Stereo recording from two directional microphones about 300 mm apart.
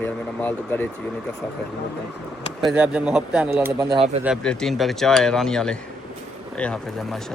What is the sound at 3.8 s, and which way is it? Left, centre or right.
Speech, centre.